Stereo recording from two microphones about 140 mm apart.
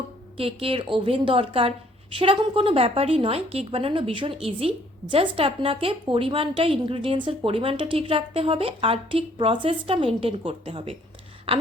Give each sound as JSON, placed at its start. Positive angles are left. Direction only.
{"t": 0.3, "sound": "a woman's voice", "side_deg": -40}